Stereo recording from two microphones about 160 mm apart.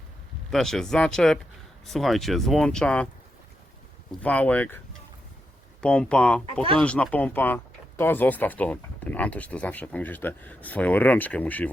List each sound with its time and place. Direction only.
0.5 s speech: 5° left (ahead or behind)
4.2 s speech: 10° left (ahead or behind)
5.8 s speech: 5° left (ahead or behind)
6.4 s speech: 35° right (ahead or behind)
6.7 s speech: 5° left (ahead or behind)